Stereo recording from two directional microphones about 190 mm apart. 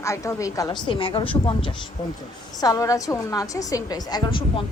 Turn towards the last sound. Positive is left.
turn(degrees=25)  # may be behind; listen again after turning